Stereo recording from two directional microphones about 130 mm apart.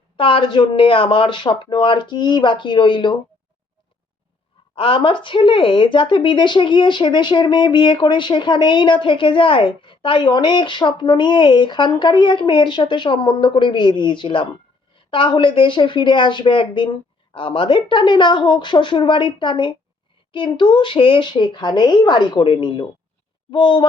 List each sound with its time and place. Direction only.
0.2 s speech: 40° left (ahead or behind)
4.7 s speech: 40° left (ahead or behind)